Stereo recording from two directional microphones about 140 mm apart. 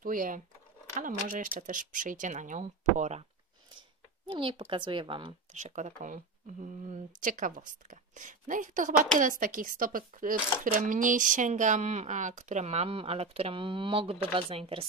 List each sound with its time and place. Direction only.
0.0 s speech: 75° right (ahead or behind); by 3.3 s 55° right (ahead or behind)
4.3 s speech: 40° right (ahead or behind)
5.5 s speech: 60° right (ahead or behind); by 14.9 s 45° right (ahead or behind)